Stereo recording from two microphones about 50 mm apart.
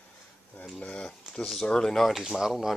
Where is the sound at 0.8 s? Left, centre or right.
Left.